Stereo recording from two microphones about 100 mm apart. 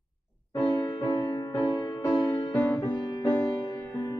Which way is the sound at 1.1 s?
35° left (ahead or behind).